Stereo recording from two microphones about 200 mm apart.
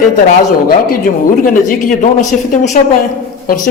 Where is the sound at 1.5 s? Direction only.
40° left (ahead or behind).